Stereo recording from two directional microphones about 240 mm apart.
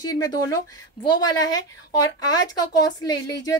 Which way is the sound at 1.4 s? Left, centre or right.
Centre.